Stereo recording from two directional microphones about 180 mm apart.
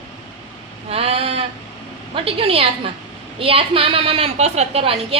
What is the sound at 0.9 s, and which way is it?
A woman's voice, 35° right (ahead or behind).